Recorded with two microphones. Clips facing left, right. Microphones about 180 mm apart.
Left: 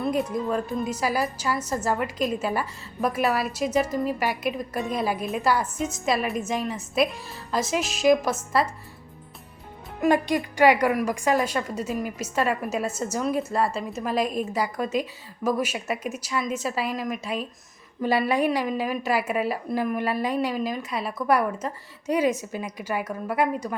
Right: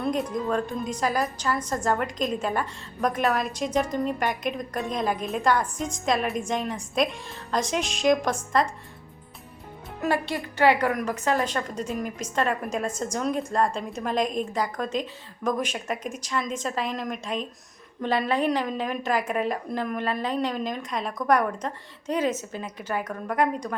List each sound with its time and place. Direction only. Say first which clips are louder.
0.0 s a woman's voice: left 1 dB; 5° left (ahead or behind)
10.0 s a woman's voice: left 5 dB; 15° left (ahead or behind)